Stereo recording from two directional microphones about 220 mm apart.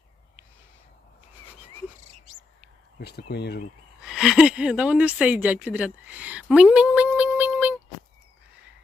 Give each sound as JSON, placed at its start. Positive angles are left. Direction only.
{"t": 3.0, "sound": "speech", "side_deg": 50}
{"t": 4.0, "sound": "speech", "side_deg": 0}